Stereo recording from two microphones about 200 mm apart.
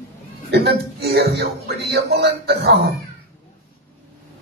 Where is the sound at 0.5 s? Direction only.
55° right (ahead or behind).